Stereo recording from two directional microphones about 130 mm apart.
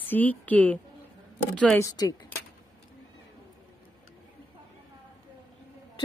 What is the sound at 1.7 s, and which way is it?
Speech, 30° left (ahead or behind).